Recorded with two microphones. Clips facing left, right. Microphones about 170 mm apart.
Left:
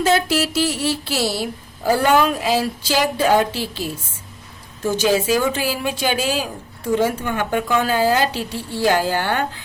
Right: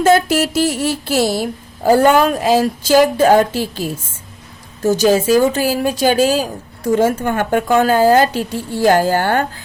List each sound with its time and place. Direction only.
0.0 s speech: 50° right (ahead or behind)